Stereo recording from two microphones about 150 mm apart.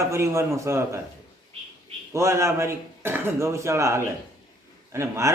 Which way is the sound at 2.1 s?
20° right (ahead or behind).